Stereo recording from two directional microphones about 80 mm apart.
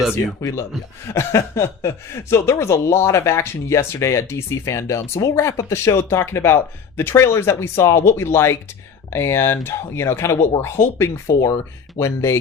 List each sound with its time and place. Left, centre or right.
0.0 s speech: centre
1.0 s speech: left